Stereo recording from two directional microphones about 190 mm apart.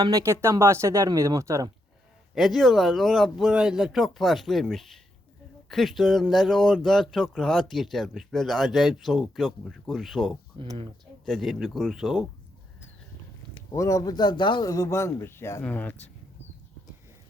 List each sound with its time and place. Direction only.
0.0 s speech: 15° right (ahead or behind)
2.3 s speech: centre (ahead or behind)
10.6 s speech: 25° right (ahead or behind)
11.3 s speech: centre (ahead or behind)
13.7 s a man's voice: 15° left (ahead or behind)